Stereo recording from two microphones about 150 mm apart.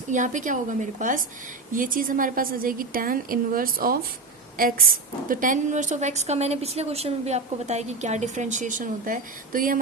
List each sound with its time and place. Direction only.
0.1 s a woman's voice: 55° right (ahead or behind)